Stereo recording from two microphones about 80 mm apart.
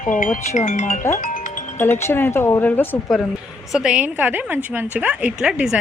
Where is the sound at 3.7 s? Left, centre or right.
Centre.